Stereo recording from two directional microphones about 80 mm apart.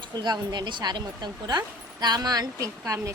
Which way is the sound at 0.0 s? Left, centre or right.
Right.